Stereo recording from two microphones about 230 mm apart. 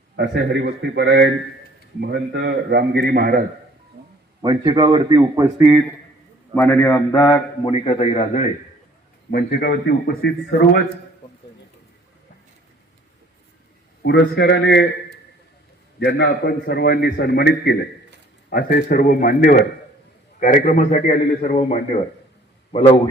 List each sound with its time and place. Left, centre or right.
0.2 s a man's voice: right
4.4 s a man's voice: right
6.5 s a man's voice: centre; by 8.4 s left
9.3 s a man's voice: left
14.0 s a man's voice: left
16.0 s a man's voice: left